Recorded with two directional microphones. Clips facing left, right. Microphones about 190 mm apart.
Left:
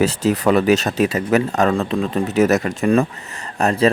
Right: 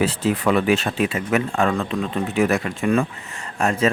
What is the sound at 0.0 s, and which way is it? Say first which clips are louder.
Speech: left 3 dB; 40° left (ahead or behind).